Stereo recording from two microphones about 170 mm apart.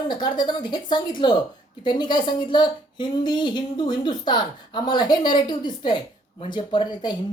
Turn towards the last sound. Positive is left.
turn(degrees=25)  # may be behind; listen again after turning